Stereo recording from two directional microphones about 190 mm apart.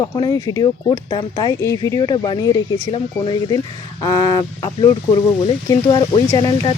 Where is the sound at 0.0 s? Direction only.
20° left (ahead or behind).